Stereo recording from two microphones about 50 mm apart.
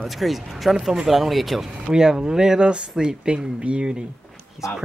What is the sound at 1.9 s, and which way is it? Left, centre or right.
Speech, centre.